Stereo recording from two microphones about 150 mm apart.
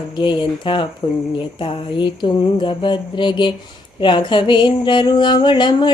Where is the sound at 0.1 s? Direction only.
30° left (ahead or behind).